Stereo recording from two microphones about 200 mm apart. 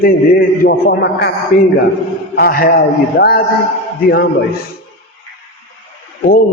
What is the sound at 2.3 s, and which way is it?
A man's voice, 50° left (ahead or behind).